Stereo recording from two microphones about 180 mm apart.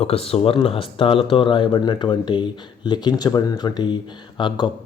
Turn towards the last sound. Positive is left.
turn(degrees=25)  # may be behind; listen again after turning